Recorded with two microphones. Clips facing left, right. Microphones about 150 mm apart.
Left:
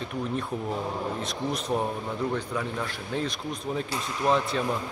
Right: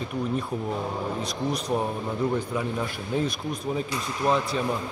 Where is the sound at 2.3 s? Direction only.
10° right (ahead or behind).